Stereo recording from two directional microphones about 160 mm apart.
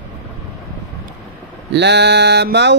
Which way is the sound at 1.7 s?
90° right.